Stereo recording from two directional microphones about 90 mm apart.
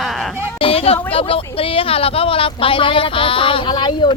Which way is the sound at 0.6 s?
90° left.